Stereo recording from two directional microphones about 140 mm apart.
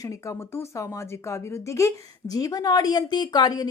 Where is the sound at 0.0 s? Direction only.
20° left (ahead or behind).